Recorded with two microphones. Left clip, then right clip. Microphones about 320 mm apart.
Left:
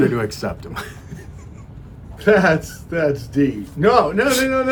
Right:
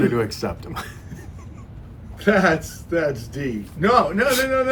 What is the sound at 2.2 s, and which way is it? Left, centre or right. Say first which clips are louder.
A man's voice: left 3 dB; left.